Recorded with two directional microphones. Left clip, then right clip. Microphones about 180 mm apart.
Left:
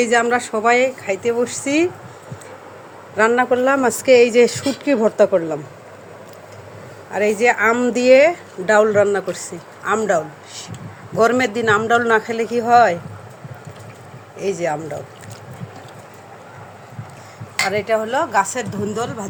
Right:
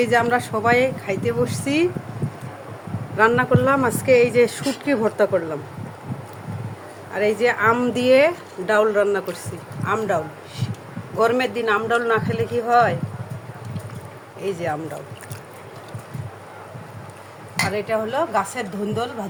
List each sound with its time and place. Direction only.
0.0 s speech: 20° left (ahead or behind)
3.2 s speech: 20° left (ahead or behind)
7.1 s a man's voice: 25° left (ahead or behind)
14.3 s a man's voice: 30° left (ahead or behind)
17.7 s a man's voice: 40° left (ahead or behind)